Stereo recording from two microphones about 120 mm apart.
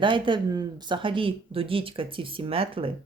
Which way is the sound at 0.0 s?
45° right (ahead or behind).